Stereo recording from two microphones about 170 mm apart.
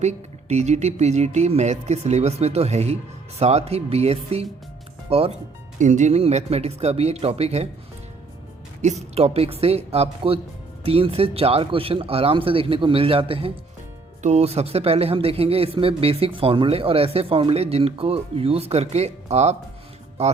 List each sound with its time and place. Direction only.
0.0 s speech: 40° right (ahead or behind)
8.8 s speech: 40° right (ahead or behind)